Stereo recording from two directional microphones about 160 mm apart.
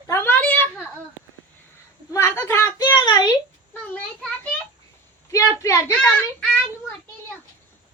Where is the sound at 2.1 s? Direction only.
15° left (ahead or behind).